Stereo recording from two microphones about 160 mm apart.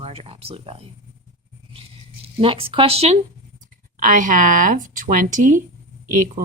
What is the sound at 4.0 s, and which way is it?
A woman's voice, 55° right (ahead or behind).